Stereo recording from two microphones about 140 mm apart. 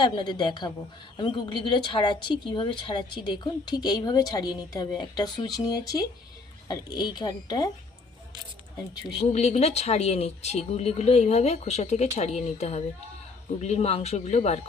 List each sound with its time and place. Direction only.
0.0 s speech: 30° left (ahead or behind)
9.3 s speech: 50° left (ahead or behind)